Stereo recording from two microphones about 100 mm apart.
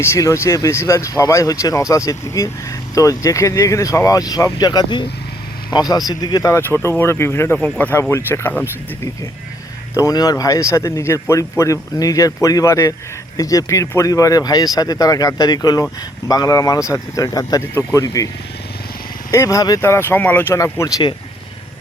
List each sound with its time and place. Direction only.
0.0 s speech: 30° left (ahead or behind)
6.5 s speech: 25° left (ahead or behind)
9.9 s speech: 35° left (ahead or behind)
19.3 s speech: 30° left (ahead or behind)
19.8 s speech: 25° left (ahead or behind)